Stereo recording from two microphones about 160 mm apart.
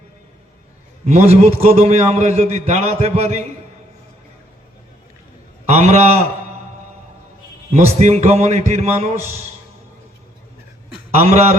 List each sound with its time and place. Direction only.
1.0 s a man's voice: 45° right (ahead or behind)
5.6 s a man's voice: 45° right (ahead or behind)
7.7 s a man's voice: 45° right (ahead or behind)
11.1 s a man's voice: 40° right (ahead or behind)